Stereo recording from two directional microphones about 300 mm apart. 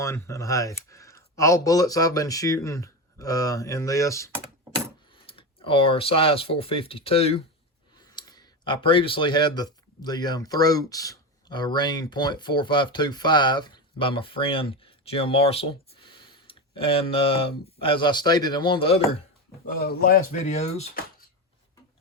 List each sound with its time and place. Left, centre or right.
0.0 s speech: centre
19.6 s speech: left